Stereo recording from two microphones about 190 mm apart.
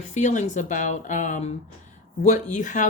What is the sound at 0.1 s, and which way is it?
Speech, 40° left (ahead or behind).